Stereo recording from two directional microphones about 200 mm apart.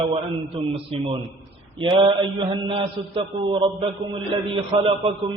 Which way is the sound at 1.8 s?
25° right (ahead or behind).